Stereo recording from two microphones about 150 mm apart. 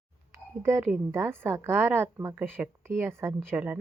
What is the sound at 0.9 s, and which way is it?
A woman's voice, 15° right (ahead or behind).